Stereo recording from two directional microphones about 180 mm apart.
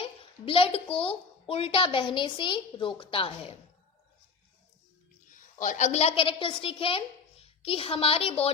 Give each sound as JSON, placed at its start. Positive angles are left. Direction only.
{"t": 0.0, "sound": "a sound", "side_deg": 30}
{"t": 0.9, "sound": "a child's voice", "side_deg": 30}
{"t": 5.3, "sound": "a woman's voice", "side_deg": 45}